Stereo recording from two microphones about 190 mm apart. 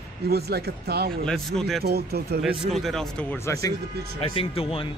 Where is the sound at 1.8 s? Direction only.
55° right (ahead or behind).